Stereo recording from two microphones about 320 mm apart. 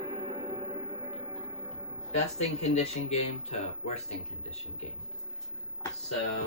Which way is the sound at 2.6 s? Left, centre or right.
Centre.